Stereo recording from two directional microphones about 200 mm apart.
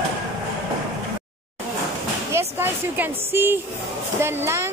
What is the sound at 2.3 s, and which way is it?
Speech, 10° right (ahead or behind).